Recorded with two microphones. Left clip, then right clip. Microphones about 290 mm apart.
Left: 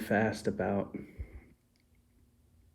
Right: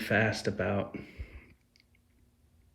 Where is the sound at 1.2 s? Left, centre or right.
Centre.